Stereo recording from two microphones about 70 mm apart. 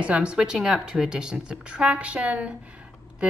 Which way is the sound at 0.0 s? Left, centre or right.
Centre.